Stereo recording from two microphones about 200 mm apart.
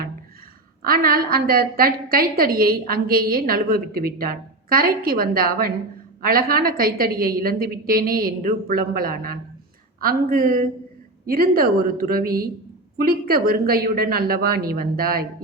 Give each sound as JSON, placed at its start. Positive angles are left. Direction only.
{"t": 0.9, "sound": "a woman's voice", "side_deg": -45}